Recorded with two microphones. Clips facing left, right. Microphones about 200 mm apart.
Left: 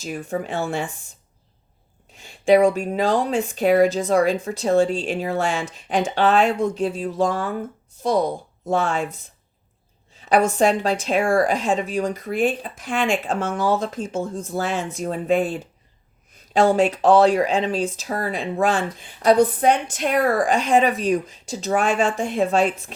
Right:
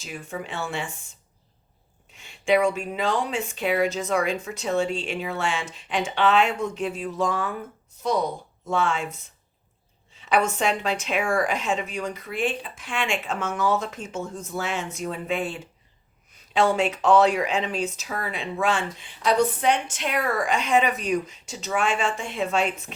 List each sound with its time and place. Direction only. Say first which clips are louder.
0.0 s speech: left 7 dB; 45° left (ahead or behind)
2.1 s speech: left 6 dB; 35° left (ahead or behind)
8.6 s speech: left 3 dB; 40° left (ahead or behind)
10.2 s speech: left 6 dB; 40° left (ahead or behind)